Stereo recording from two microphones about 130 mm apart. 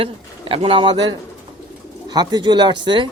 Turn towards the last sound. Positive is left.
turn(degrees=-35)  # may be behind; listen again after turning